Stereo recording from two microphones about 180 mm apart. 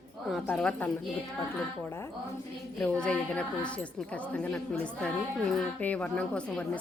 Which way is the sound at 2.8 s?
5° left (ahead or behind).